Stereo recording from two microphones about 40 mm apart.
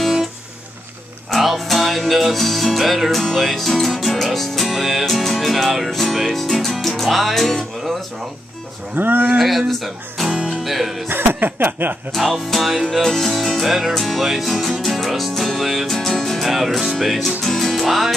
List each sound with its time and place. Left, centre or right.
1.3 s music: centre
6.5 s speech: centre
6.9 s music: centre
8.9 s speech: right
9.4 s music: centre
9.7 s speech: centre
10.3 s music: right
10.6 s music: centre
11.1 s chuckle: right
12.3 s music: centre
17.8 s music: centre